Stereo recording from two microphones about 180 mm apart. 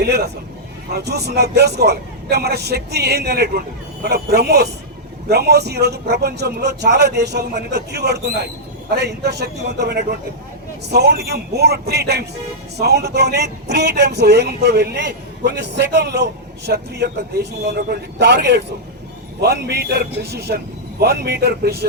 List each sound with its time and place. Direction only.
0.0 s a man's voice: 65° right (ahead or behind)